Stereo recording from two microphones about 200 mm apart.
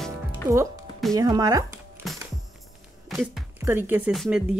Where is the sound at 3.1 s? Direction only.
10° right (ahead or behind).